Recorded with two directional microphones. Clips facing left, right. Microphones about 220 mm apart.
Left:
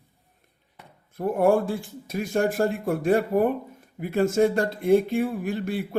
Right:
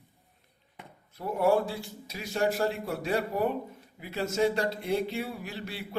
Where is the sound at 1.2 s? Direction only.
50° left (ahead or behind).